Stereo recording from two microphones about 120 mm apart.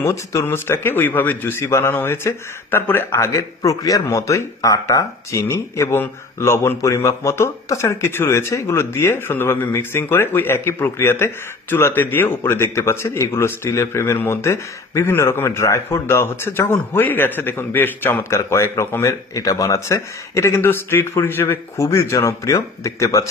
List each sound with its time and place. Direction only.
0.0 s a man's voice: 25° left (ahead or behind)